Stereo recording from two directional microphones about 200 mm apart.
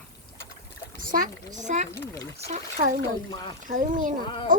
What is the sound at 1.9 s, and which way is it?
Speech, 15° left (ahead or behind).